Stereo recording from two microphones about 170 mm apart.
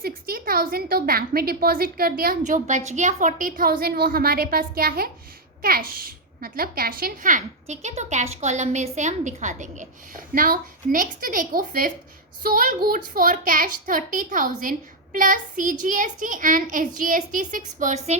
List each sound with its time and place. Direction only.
0.0 s a woman's voice: 60° right (ahead or behind); by 18.2 s 40° right (ahead or behind)